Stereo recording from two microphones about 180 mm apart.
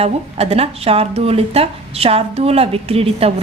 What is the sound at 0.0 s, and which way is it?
A woman's voice, 35° right (ahead or behind).